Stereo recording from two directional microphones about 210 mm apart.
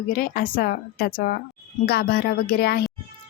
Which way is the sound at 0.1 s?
45° left (ahead or behind).